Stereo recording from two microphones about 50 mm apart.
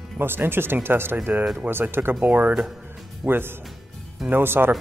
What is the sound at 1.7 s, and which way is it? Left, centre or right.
Speech, right.